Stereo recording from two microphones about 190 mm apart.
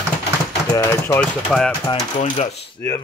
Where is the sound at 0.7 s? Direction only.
15° left (ahead or behind).